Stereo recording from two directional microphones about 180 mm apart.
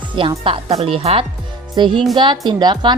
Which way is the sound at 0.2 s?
30° right (ahead or behind).